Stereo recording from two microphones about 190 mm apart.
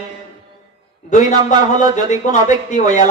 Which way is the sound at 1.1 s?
40° left (ahead or behind).